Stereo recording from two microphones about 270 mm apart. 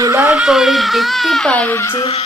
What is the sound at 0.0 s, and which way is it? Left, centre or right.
Speech, centre.